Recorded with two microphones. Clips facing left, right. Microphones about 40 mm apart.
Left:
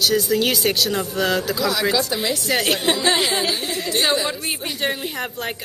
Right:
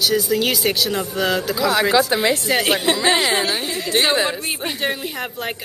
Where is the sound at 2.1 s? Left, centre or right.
Right.